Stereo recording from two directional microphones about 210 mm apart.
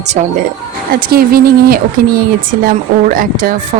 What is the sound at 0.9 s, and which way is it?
Speech, 45° right (ahead or behind).